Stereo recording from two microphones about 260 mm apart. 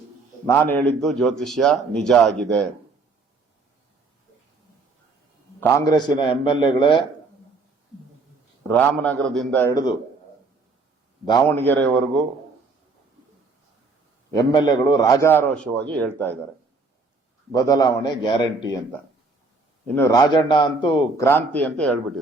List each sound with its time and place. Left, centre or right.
0.4 s a man's voice: centre
5.5 s a man's voice: centre
8.7 s a man's voice: centre
11.3 s a man's voice: centre
14.3 s a man's voice: centre
17.5 s a man's voice: centre
20.0 s a man's voice: centre